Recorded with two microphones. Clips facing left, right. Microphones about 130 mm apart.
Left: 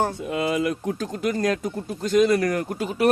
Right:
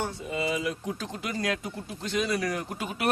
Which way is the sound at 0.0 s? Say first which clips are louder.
Left 6 dB; 55° left (ahead or behind).